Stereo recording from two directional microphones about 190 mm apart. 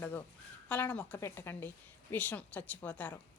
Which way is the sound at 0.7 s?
10° left (ahead or behind).